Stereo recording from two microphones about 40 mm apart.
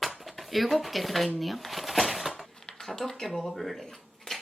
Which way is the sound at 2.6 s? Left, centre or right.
Centre.